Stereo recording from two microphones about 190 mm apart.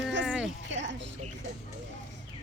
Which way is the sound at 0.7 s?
70° right (ahead or behind).